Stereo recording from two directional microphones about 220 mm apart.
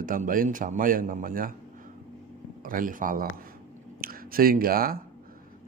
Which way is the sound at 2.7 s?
40° right (ahead or behind).